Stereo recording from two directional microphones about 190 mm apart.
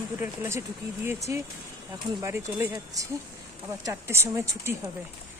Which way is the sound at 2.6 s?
15° right (ahead or behind).